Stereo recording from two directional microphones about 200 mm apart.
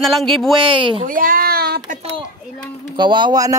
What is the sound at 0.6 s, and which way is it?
Speech, 25° right (ahead or behind).